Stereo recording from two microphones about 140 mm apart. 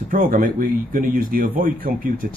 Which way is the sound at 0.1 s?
85° right.